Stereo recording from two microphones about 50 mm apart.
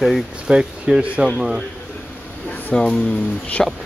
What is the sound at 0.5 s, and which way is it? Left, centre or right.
Speech, centre.